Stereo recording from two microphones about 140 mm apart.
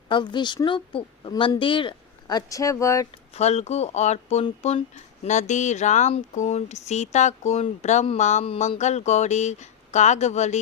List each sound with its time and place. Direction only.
0.1 s speech: 35° left (ahead or behind)
3.3 s speech: 50° left (ahead or behind)